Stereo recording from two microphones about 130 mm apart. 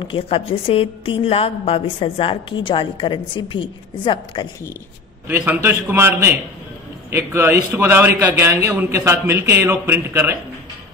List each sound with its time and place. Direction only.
0.0 s a woman's voice: 45° left (ahead or behind)
5.3 s a man's voice: 15° right (ahead or behind)